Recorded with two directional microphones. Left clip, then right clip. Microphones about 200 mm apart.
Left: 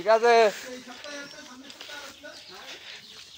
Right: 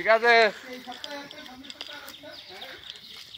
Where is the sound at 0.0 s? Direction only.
20° left (ahead or behind).